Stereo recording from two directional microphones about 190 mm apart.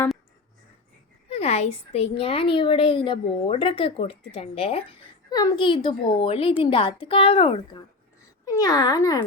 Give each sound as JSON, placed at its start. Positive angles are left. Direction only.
{"t": 1.3, "sound": "a woman's voice", "side_deg": 35}